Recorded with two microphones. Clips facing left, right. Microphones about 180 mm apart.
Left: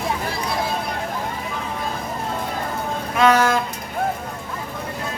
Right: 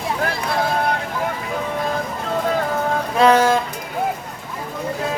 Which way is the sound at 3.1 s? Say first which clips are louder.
Right 2 dB; 30° right (ahead or behind).